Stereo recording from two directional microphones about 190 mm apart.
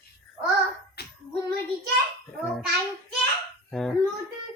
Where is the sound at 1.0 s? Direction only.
55° left (ahead or behind).